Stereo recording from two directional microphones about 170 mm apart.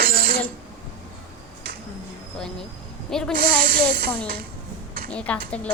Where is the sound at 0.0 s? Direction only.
60° right (ahead or behind).